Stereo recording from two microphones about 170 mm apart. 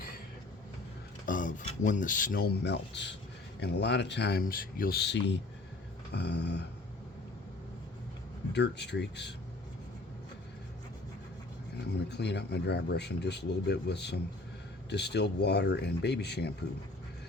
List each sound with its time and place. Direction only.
1.3 s speech: 50° left (ahead or behind); by 6.7 s 80° left
8.5 s speech: 90° left
12.0 s speech: 80° left